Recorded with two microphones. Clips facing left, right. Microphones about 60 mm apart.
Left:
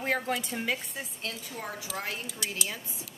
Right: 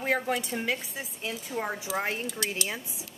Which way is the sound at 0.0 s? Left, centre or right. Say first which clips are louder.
Right 2 dB; centre.